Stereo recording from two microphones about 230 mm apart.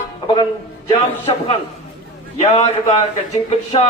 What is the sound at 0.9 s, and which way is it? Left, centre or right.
A man's voice, left.